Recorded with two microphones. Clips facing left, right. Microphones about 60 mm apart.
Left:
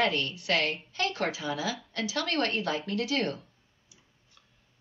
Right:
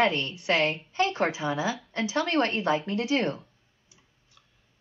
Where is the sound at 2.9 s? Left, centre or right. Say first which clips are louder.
Right 3 dB; centre.